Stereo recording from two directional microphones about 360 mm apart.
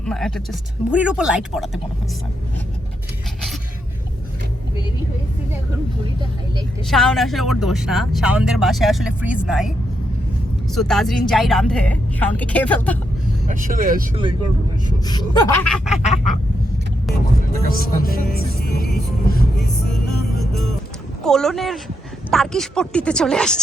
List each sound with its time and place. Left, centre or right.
0.0 s speech: centre
6.9 s speech: centre
10.8 s speech: centre
13.5 s speech: right
15.0 s speech: centre
17.7 s speech: left
21.2 s speech: centre